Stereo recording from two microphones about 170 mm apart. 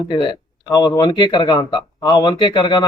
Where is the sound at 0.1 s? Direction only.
25° left (ahead or behind).